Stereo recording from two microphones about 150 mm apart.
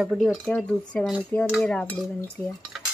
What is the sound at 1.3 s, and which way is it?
Dishes, 10° left (ahead or behind).